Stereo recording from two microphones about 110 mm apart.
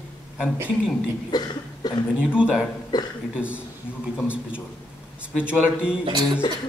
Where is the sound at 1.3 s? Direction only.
40° left (ahead or behind).